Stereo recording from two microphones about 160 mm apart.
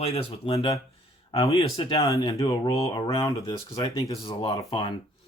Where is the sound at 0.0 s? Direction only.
40° left (ahead or behind).